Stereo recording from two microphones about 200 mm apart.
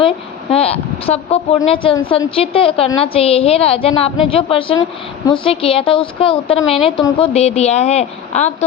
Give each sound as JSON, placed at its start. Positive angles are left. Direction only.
{"t": 0.5, "sound": "a woman's voice", "side_deg": 30}